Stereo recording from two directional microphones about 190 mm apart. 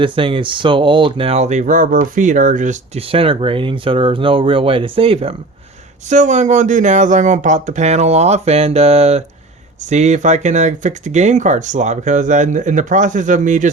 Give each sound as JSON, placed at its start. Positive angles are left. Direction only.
{"t": 0.0, "sound": "speech", "side_deg": -25}